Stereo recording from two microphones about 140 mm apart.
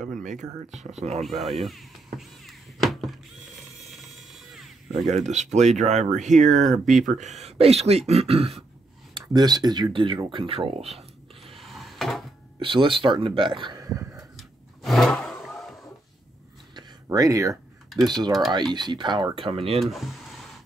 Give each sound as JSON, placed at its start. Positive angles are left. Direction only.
{"t": 0.2, "sound": "speech", "side_deg": -65}
{"t": 0.7, "sound": "speech", "side_deg": -50}
{"t": 1.2, "sound": "a sound", "side_deg": 0}
{"t": 5.0, "sound": "speech", "side_deg": -55}
{"t": 9.1, "sound": "speech", "side_deg": -30}
{"t": 11.4, "sound": "drawer open or close", "side_deg": 0}
{"t": 12.5, "sound": "speech", "side_deg": -40}
{"t": 14.8, "sound": "vehicle", "side_deg": 0}
{"t": 16.7, "sound": "a sound", "side_deg": -25}
{"t": 18.0, "sound": "speech", "side_deg": -30}
{"t": 19.8, "sound": "a sound", "side_deg": 0}